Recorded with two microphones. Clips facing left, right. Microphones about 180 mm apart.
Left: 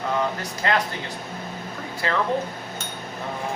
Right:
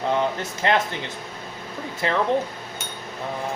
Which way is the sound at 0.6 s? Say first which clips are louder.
Right 2 dB; 25° right (ahead or behind).